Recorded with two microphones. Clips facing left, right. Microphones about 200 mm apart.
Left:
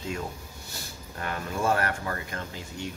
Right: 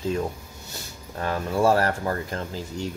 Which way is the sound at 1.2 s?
30° right (ahead or behind).